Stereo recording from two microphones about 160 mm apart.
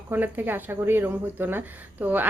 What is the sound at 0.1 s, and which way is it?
Speech, 10° right (ahead or behind).